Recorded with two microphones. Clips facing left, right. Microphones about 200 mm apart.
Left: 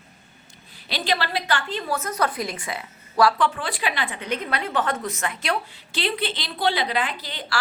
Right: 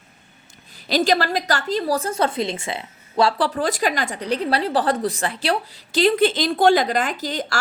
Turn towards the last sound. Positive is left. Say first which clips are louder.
# right 6 dB
turn(degrees=-45)  # may be behind; listen again after turning